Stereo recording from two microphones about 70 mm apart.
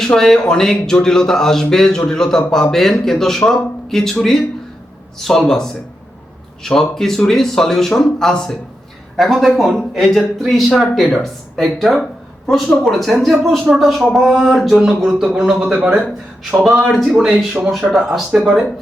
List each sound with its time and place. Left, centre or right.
0.0 s speech: centre
16.6 s speech: centre
17.2 s speech: centre
17.7 s speech: centre